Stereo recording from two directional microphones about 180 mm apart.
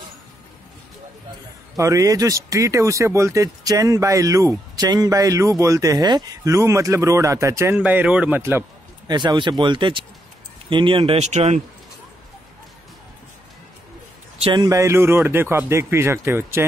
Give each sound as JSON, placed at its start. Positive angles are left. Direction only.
{"t": 1.8, "sound": "speech", "side_deg": -20}
{"t": 9.1, "sound": "speech", "side_deg": -25}
{"t": 14.4, "sound": "speech", "side_deg": -25}